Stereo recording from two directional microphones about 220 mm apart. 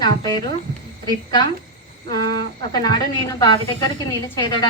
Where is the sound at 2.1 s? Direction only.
45° right (ahead or behind).